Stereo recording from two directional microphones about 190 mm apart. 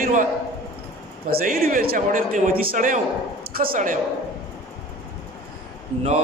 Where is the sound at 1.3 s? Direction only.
50° right (ahead or behind).